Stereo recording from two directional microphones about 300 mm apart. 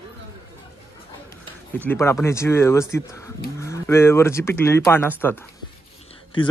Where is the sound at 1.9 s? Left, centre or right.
Centre.